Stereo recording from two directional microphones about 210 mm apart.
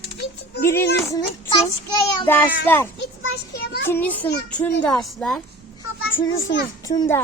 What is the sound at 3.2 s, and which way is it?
Speech, 55° left (ahead or behind).